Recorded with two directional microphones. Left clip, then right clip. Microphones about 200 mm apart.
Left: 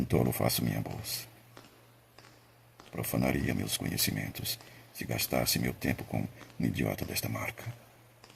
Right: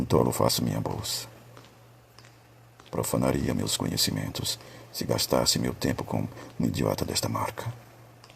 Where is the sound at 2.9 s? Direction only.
30° right (ahead or behind).